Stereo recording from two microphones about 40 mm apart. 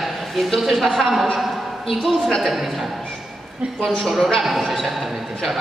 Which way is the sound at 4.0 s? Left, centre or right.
Centre.